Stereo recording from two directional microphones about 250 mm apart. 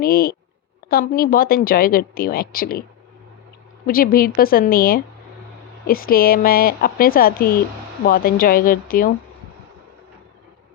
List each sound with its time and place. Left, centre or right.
0.0 s speech: left
3.8 s speech: left